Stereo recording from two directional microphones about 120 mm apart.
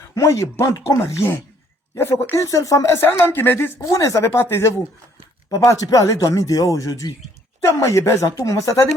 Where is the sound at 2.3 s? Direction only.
25° left (ahead or behind).